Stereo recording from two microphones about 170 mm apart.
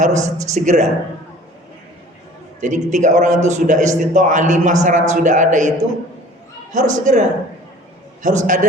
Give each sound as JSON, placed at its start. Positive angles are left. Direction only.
{"t": 0.0, "sound": "a man's voice", "side_deg": -45}
{"t": 2.6, "sound": "a man's voice", "side_deg": -45}
{"t": 6.7, "sound": "a man's voice", "side_deg": -45}